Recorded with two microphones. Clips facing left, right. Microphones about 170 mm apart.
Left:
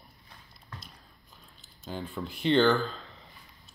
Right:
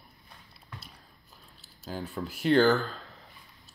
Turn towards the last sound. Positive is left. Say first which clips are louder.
# right 1 dB
turn(degrees=-5)  # may be behind; listen again after turning